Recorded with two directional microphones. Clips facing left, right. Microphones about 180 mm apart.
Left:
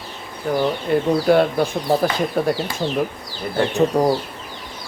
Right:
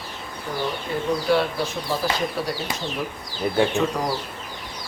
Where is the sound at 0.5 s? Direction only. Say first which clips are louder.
Left 8 dB; 60° left (ahead or behind).